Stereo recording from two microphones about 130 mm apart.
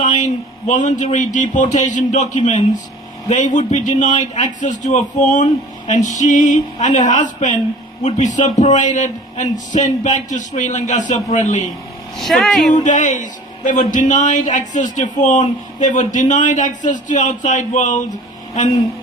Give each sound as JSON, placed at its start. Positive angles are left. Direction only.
{"t": 0.0, "sound": "a sound", "side_deg": 70}
{"t": 0.7, "sound": "a man's voice", "side_deg": 65}
{"t": 12.1, "sound": "speech", "side_deg": 0}
{"t": 12.7, "sound": "a man's voice", "side_deg": 70}